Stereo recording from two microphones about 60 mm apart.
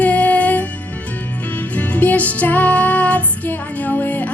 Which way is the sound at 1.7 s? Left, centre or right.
Left.